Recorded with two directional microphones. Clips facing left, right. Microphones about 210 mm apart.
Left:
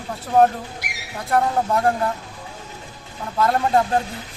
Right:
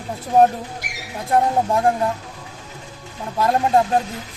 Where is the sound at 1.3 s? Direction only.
20° right (ahead or behind).